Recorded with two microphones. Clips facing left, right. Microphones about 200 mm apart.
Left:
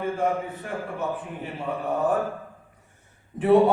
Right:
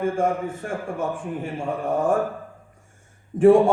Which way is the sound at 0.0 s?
45° right (ahead or behind).